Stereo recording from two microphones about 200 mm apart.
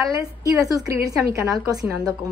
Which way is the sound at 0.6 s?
15° right (ahead or behind).